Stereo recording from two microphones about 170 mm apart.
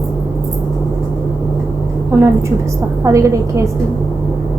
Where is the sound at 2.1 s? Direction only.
10° right (ahead or behind).